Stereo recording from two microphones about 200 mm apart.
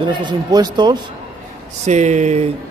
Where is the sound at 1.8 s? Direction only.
35° right (ahead or behind).